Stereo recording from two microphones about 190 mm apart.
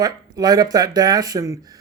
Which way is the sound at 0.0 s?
20° right (ahead or behind).